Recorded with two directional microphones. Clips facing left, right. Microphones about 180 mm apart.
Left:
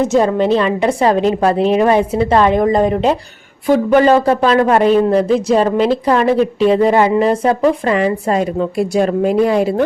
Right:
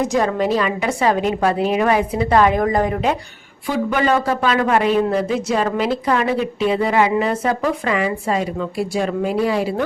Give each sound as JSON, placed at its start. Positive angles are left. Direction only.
{"t": 0.0, "sound": "a man's voice", "side_deg": 25}
{"t": 3.9, "sound": "a man's voice", "side_deg": 35}